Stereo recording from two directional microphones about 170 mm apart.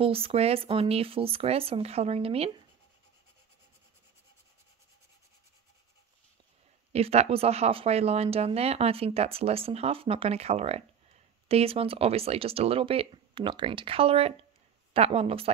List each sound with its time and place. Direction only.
0.0 s speech: 35° right (ahead or behind)
6.9 s speech: 35° right (ahead or behind)